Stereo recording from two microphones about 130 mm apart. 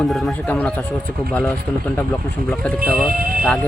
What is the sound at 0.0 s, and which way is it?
Speech, centre (ahead or behind).